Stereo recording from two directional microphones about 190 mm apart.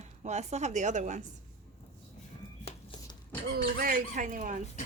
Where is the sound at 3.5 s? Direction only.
50° right (ahead or behind).